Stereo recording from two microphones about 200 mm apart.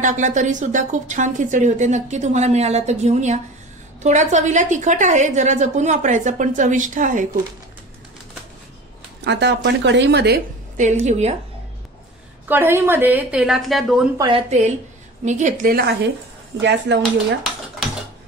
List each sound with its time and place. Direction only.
0.0 s a woman's voice: 40° right (ahead or behind)
9.2 s a woman's voice: 60° right (ahead or behind)
10.8 s a woman's voice: 35° right (ahead or behind)
12.4 s a woman's voice: 10° right (ahead or behind)
14.1 s speech: 20° right (ahead or behind)
14.5 s a woman's voice: 35° right (ahead or behind); by 16.1 s 50° right (ahead or behind)
16.6 s a woman's voice: 65° right (ahead or behind)